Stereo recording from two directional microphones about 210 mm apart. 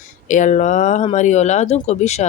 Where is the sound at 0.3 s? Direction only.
35° left (ahead or behind).